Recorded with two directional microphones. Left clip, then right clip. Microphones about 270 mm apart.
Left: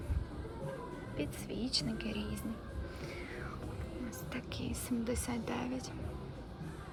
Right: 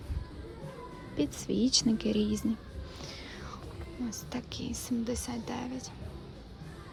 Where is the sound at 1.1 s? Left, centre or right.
Right.